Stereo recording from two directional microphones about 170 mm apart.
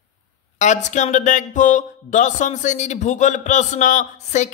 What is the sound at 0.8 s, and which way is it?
Speech, 45° left (ahead or behind).